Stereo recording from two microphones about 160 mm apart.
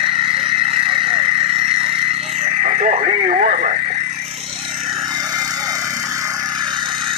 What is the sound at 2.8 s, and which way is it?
Speech, 45° right (ahead or behind).